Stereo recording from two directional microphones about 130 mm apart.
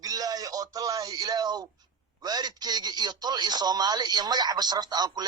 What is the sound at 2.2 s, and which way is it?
Speech, 30° right (ahead or behind).